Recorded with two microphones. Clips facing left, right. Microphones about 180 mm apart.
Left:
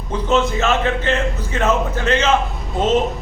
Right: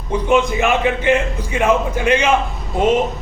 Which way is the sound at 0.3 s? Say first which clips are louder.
Right 1 dB; 15° right (ahead or behind).